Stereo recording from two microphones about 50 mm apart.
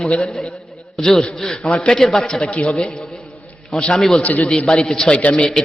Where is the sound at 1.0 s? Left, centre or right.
Centre.